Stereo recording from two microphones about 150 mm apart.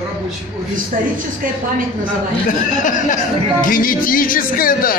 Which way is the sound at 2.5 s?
60° left (ahead or behind).